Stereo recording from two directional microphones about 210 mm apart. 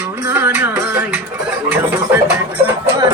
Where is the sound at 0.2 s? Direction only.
10° right (ahead or behind).